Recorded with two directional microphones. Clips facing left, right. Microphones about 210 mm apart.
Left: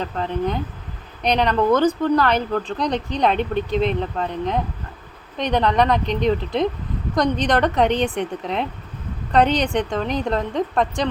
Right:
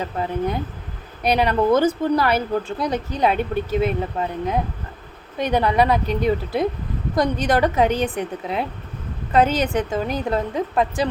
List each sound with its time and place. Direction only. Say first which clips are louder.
0.0 s a woman's voice: even; 10° right (ahead or behind)